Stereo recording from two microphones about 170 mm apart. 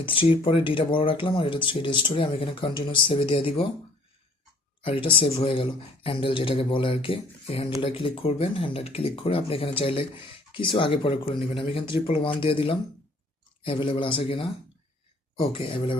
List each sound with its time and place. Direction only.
0.0 s speech: 30° left (ahead or behind)
4.8 s speech: 30° left (ahead or behind)